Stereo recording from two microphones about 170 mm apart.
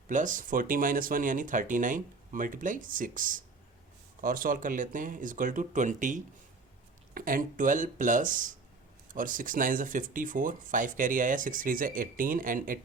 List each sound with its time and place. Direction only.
0.1 s speech: 50° right (ahead or behind)